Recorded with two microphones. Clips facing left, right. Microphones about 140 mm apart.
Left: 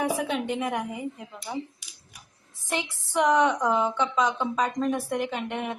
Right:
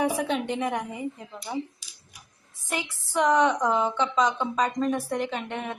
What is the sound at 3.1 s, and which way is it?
A woman's voice, 15° left (ahead or behind).